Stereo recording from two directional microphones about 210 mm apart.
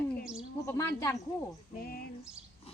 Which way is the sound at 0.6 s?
15° left (ahead or behind).